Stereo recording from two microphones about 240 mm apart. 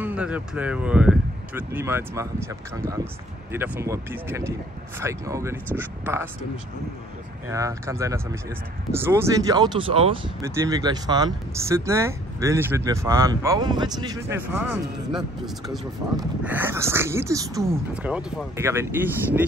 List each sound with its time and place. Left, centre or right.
0.0 s speech: centre
7.4 s speech: centre
10.4 s speech: centre